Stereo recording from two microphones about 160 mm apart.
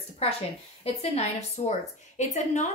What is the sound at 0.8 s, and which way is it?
A woman's voice, 40° left (ahead or behind).